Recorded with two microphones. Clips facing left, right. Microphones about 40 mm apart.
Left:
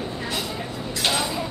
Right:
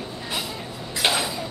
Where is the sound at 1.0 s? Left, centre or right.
Centre.